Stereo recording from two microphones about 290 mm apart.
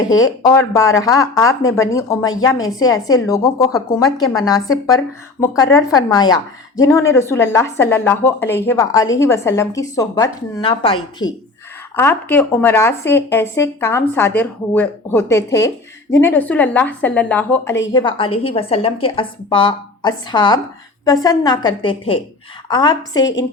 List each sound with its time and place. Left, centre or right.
0.2 s a woman's voice: centre
17.9 s a woman's voice: centre